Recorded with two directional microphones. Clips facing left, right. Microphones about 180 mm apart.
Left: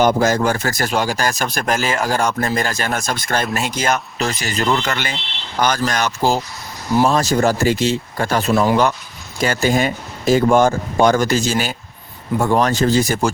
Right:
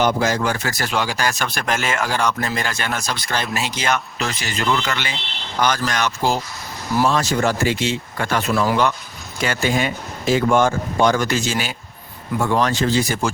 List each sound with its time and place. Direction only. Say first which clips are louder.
0.0 s speech: left 4 dB; 45° left (ahead or behind)
8.5 s speech: left 4 dB; 20° left (ahead or behind)
9.4 s speech: left 4 dB; 40° left (ahead or behind)